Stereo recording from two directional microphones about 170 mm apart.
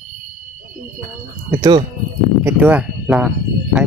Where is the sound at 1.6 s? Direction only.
30° right (ahead or behind).